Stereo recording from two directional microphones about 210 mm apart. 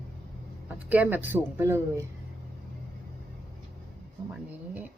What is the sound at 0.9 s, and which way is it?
Speech, 10° right (ahead or behind).